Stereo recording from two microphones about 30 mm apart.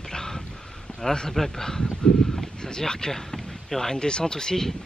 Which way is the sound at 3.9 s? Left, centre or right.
Left.